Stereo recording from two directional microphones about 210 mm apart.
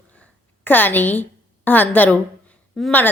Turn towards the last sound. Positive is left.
turn(degrees=5)  # may be behind; listen again after turning